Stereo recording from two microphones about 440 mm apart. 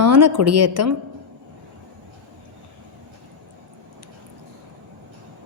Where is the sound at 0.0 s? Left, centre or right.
Right.